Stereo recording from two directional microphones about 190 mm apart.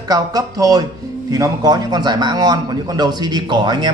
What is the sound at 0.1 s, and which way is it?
A man's voice, 20° right (ahead or behind).